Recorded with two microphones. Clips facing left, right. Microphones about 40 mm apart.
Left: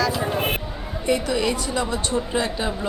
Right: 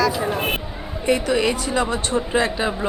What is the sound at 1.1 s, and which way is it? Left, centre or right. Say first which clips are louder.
Speech: right 3 dB; centre.